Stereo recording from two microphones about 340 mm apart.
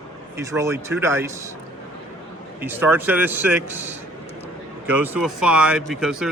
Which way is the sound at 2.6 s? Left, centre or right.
Centre.